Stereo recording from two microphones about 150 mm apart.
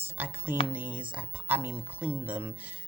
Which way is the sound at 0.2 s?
15° right (ahead or behind).